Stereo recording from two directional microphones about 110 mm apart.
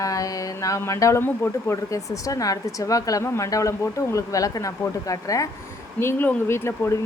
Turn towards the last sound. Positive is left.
turn(degrees=20)  # may be behind; listen again after turning